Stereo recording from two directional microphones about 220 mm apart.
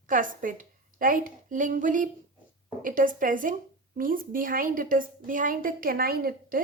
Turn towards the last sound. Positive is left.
turn(degrees=-40)  # may be behind; listen again after turning